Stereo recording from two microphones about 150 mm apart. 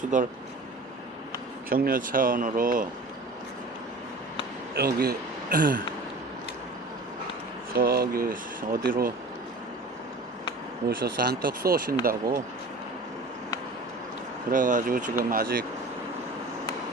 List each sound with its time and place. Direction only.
0.1 s speech: 55° right (ahead or behind)
1.7 s speech: 75° right (ahead or behind)
4.8 s speech: 90° right; by 5.8 s 70° right (ahead or behind)
7.7 s speech: 80° right
10.8 s speech: 90° right
14.5 s speech: 60° right (ahead or behind)
15.2 s speech: 75° right (ahead or behind)